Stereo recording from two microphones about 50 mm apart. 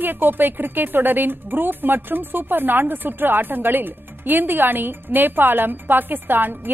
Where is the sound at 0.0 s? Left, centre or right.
Right.